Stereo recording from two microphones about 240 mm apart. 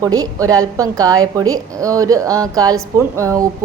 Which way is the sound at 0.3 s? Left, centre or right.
Centre.